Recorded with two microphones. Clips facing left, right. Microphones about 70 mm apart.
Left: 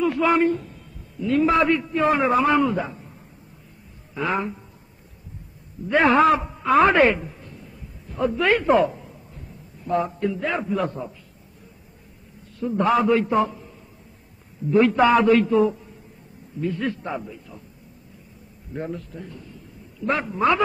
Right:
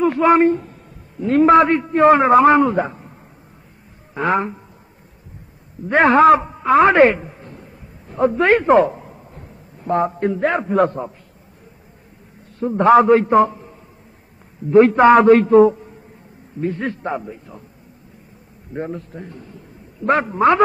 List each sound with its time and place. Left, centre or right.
0.0 s a man's voice: right
4.1 s a man's voice: right
5.9 s a man's voice: right
6.4 s a man's voice: right
6.9 s a sound: right
12.5 s a man's voice: right
18.7 s a man's voice: right